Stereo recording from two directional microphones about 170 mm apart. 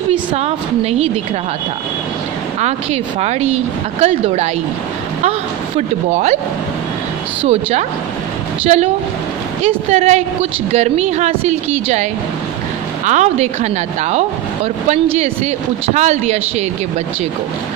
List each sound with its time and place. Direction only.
0.1 s a woman's voice: 35° right (ahead or behind)
2.6 s a woman's voice: 40° right (ahead or behind)
5.8 s a woman's voice: 40° right (ahead or behind)
8.6 s a woman's voice: 40° right (ahead or behind)